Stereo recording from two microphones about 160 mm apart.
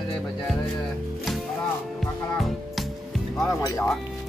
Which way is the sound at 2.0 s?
Centre (ahead or behind).